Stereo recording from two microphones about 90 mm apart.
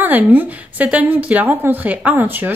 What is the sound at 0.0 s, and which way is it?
A woman's voice, 20° right (ahead or behind).